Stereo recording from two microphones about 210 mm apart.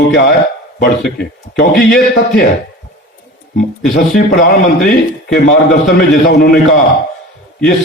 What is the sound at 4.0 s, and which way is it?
Speech, 45° left (ahead or behind).